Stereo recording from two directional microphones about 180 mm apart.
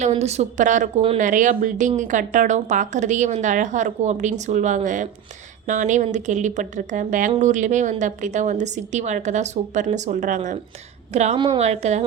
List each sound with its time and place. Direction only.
0.0 s speech: 35° right (ahead or behind)